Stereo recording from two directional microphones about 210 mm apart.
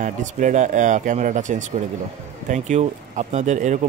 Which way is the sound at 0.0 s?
35° right (ahead or behind).